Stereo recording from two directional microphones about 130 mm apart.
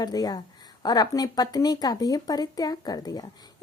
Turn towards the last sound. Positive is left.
turn(degrees=30)  # may be behind; listen again after turning